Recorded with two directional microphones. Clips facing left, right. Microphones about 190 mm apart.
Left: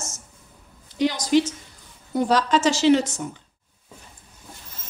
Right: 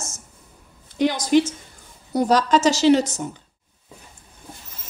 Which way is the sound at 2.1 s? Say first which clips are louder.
Right 2 dB; 40° right (ahead or behind).